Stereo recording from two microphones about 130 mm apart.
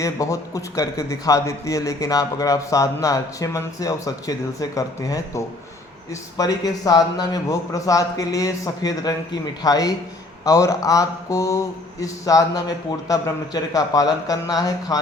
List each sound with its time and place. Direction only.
0.0 s a man's voice: 25° left (ahead or behind)